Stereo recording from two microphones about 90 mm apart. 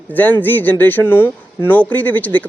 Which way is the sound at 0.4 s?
20° left (ahead or behind).